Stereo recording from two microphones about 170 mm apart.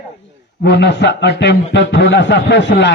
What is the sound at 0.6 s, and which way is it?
A man's voice, 85° left.